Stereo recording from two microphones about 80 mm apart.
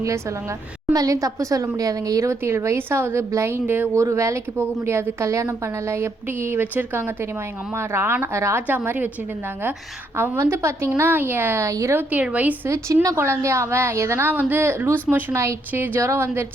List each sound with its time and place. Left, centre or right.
0.0 s a woman's voice: right
8.6 s a woman's voice: right
10.3 s a woman's voice: right
11.9 s a woman's voice: centre
12.6 s a woman's voice: right